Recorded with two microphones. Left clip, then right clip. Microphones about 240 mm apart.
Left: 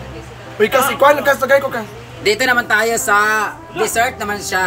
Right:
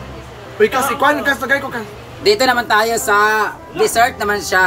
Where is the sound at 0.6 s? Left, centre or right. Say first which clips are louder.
Left 1 dB; left.